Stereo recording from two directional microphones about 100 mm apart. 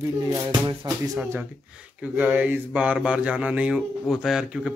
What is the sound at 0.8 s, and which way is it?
Speech, 45° right (ahead or behind).